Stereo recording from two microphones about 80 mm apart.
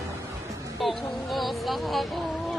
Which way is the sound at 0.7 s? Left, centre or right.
Centre.